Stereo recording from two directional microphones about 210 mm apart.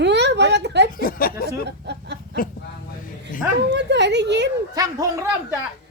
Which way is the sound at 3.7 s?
55° right (ahead or behind).